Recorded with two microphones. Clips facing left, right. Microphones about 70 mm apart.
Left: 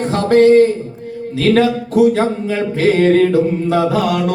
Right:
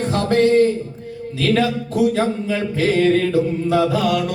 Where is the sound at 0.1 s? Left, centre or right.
Left.